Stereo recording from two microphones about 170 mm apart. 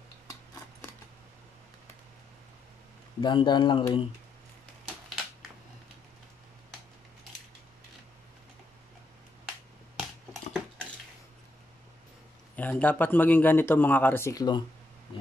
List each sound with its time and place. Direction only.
3.2 s speech: 30° left (ahead or behind)
12.5 s speech: 10° left (ahead or behind)